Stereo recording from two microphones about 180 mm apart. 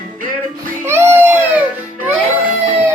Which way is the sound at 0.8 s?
15° right (ahead or behind).